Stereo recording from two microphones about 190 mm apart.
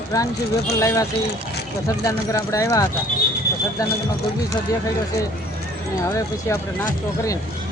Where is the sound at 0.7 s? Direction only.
15° left (ahead or behind).